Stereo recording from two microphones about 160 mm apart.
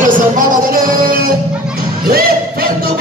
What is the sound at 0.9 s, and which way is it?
Music, 65° right (ahead or behind).